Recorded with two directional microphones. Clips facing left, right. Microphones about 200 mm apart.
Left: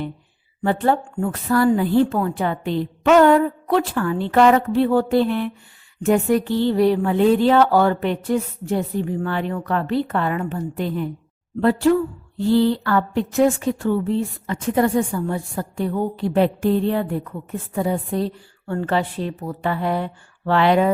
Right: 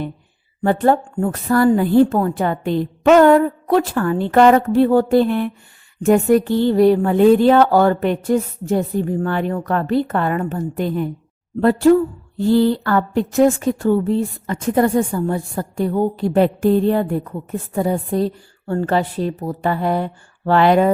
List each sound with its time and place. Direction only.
0.6 s a woman's voice: 45° right (ahead or behind)